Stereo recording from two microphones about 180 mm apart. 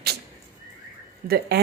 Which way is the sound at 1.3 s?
65° right (ahead or behind).